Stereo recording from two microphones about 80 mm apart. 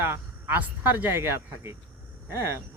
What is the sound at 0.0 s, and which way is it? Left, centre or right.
Speech, right.